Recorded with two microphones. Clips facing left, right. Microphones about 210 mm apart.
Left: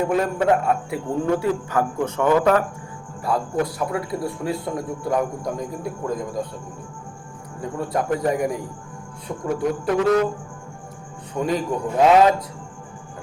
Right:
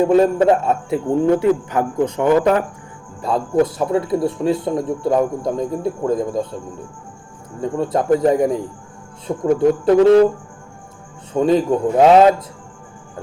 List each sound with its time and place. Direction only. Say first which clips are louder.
0.0 s a man's voice: right 7 dB; 30° right (ahead or behind)
2.4 s speech: right 2 dB; 25° right (ahead or behind)
7.6 s speech: right 5 dB; 25° right (ahead or behind)
11.3 s speech: right 8 dB; 25° right (ahead or behind)